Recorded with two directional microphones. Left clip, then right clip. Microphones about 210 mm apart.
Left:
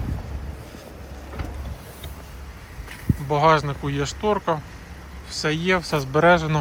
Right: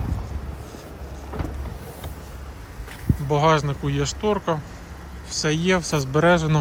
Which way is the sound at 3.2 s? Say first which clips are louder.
Left 1 dB; 10° right (ahead or behind).